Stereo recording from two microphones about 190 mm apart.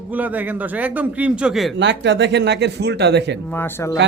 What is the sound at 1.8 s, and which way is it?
Speech, 65° right (ahead or behind).